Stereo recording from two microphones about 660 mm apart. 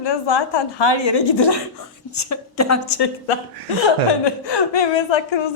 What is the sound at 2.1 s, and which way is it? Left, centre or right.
Speech, left.